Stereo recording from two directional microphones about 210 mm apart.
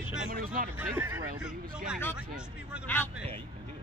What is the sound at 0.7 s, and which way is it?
Speech, 10° right (ahead or behind).